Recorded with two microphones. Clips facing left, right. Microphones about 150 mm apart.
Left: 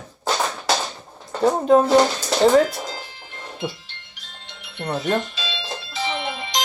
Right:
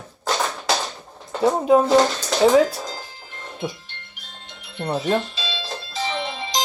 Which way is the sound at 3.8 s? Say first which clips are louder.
Right 2 dB; 50° right (ahead or behind).